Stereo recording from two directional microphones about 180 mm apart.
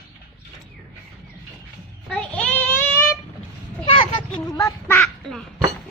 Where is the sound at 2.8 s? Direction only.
15° left (ahead or behind).